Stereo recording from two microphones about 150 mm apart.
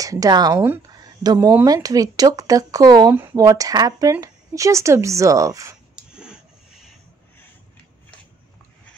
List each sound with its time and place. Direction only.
0.0 s speech: 25° right (ahead or behind)
1.2 s speech: 25° right (ahead or behind)
6.1 s a sound: 5° right (ahead or behind)